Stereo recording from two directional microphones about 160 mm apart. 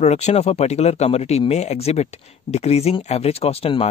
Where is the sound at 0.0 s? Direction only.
45° left (ahead or behind).